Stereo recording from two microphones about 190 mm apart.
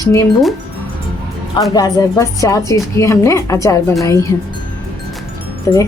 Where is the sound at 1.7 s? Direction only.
20° left (ahead or behind).